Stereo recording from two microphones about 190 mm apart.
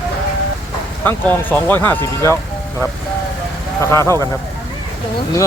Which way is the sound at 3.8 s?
15° left (ahead or behind).